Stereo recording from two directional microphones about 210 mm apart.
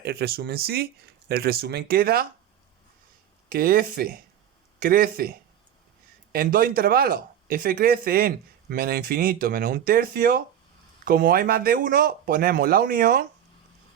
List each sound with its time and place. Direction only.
0.0 s speech: 50° right (ahead or behind)
3.5 s speech: 45° right (ahead or behind)
6.3 s speech: 45° right (ahead or behind)